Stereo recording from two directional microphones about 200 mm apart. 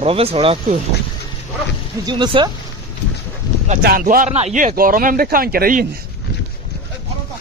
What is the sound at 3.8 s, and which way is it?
Speech, 45° right (ahead or behind).